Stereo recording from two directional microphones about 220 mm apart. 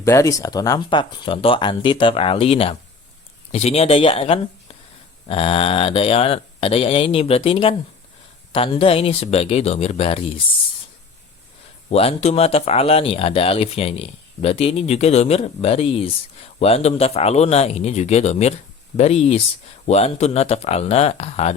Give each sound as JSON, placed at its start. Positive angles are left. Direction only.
{"t": 0.0, "sound": "speech", "side_deg": 15}
{"t": 11.9, "sound": "speech", "side_deg": 25}